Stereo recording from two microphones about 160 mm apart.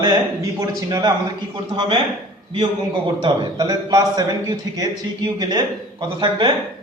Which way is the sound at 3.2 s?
25° right (ahead or behind).